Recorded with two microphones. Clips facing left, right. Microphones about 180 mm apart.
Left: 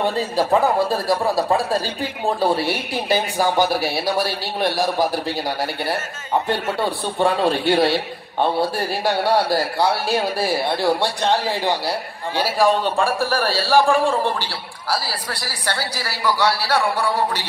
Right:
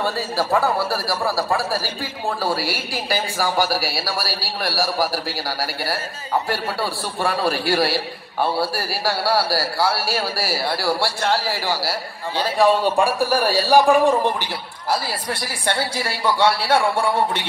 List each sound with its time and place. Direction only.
0.0 s a man's voice: 20° left (ahead or behind)
12.4 s a man's voice: centre (ahead or behind)
12.9 s a man's voice: 15° right (ahead or behind)